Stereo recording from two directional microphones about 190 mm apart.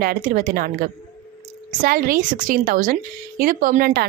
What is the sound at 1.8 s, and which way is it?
Speech, 50° right (ahead or behind).